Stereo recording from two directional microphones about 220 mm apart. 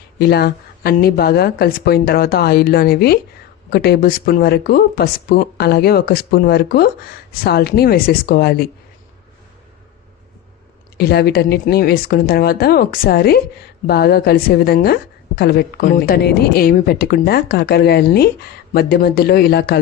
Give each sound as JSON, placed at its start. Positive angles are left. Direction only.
{"t": 0.2, "sound": "speech", "side_deg": 45}
{"t": 10.9, "sound": "speech", "side_deg": 45}